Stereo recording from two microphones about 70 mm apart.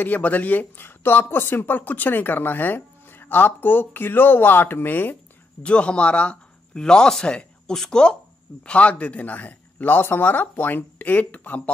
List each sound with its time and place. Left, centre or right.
0.0 s speech: left
5.6 s a man's voice: centre